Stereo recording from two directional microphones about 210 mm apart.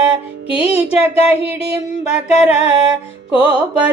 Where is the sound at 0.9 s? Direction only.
30° left (ahead or behind).